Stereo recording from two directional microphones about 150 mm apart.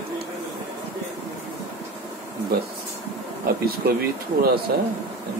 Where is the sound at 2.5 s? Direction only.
90° right.